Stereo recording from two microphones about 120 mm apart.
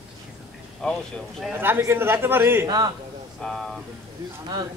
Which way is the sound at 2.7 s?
35° right (ahead or behind).